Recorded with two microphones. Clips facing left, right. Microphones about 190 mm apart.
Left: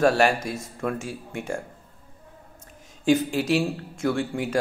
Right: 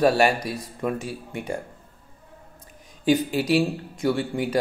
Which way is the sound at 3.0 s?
Centre (ahead or behind).